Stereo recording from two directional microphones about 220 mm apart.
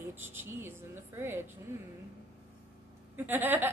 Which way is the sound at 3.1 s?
10° right (ahead or behind).